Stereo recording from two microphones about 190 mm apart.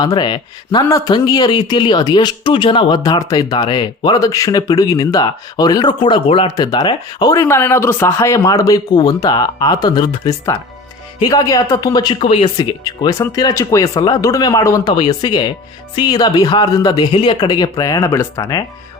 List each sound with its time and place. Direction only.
0.0 s a man's voice: 20° left (ahead or behind)